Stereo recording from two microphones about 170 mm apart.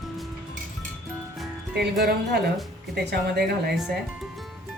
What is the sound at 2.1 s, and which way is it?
Speech, 75° right (ahead or behind).